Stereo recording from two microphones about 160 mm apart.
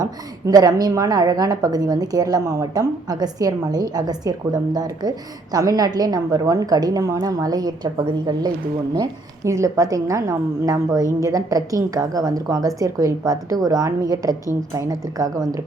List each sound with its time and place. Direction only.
0.0 s a woman's voice: 25° right (ahead or behind)